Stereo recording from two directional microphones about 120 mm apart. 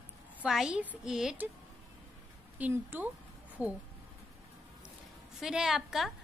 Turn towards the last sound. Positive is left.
turn(degrees=-5)  # may be behind; listen again after turning